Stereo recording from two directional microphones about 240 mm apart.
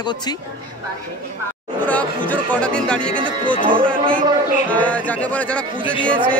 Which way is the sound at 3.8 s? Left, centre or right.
Centre.